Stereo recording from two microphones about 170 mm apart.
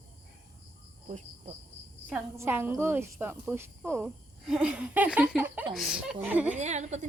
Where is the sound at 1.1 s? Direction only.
45° right (ahead or behind).